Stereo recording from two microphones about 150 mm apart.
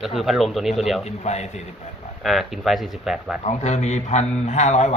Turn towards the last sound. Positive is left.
turn(degrees=50)  # may be behind; listen again after turning